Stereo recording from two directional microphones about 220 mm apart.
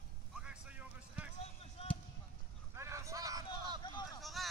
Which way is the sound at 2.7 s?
15° right (ahead or behind).